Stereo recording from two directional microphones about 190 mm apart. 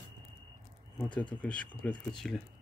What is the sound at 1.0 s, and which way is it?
Speech, 5° left (ahead or behind).